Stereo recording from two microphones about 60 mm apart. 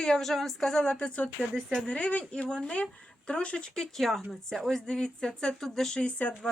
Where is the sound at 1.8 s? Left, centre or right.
Left.